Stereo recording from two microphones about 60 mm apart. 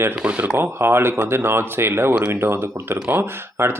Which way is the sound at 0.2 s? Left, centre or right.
Right.